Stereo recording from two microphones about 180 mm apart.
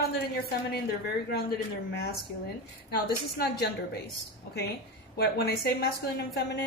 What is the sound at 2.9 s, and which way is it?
Speech, 65° left (ahead or behind).